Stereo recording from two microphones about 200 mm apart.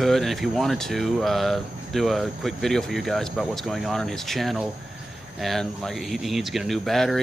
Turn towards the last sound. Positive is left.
turn(degrees=0)  # may be behind; listen again after turning